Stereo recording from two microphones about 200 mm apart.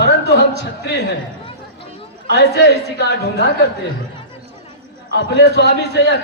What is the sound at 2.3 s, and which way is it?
A man's voice, 55° left (ahead or behind).